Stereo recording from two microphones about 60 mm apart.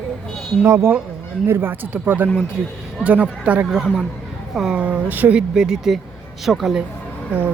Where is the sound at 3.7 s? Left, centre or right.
Centre.